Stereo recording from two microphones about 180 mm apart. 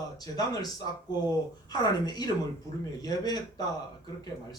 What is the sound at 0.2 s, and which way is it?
Speech, 20° left (ahead or behind).